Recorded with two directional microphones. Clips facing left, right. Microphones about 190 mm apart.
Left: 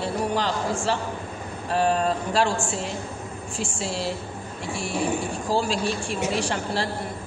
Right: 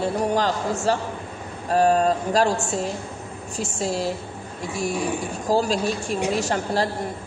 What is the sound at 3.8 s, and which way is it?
Speech, 40° right (ahead or behind).